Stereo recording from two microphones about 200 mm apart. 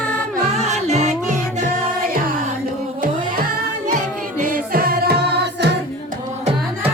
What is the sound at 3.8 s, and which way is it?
Music, 40° right (ahead or behind).